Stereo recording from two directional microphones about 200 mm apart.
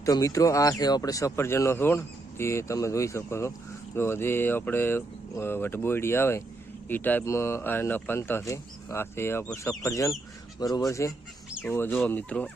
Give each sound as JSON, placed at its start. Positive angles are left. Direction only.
{"t": 0.0, "sound": "speech", "side_deg": 15}